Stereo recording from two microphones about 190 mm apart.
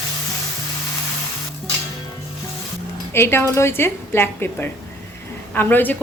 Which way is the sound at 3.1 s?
10° left (ahead or behind).